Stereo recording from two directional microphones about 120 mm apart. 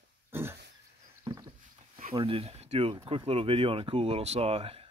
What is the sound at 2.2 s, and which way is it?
Speech, 55° right (ahead or behind).